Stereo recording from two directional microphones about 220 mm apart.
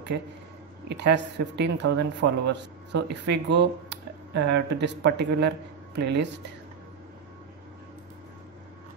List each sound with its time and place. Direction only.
0.8 s a man's voice: 50° right (ahead or behind)